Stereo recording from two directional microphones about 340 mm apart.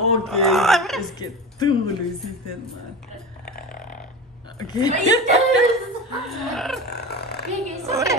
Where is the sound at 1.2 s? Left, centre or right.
Centre.